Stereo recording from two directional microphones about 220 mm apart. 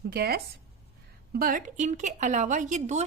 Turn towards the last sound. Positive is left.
turn(degrees=-35)  # may be behind; listen again after turning